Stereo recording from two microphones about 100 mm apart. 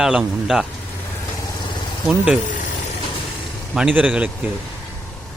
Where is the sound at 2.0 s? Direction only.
10° right (ahead or behind).